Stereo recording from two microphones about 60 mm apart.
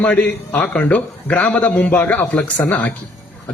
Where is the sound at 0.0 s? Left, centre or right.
Left.